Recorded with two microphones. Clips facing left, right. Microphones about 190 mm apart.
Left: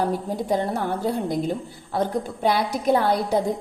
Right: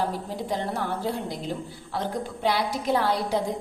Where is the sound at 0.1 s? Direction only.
50° left (ahead or behind).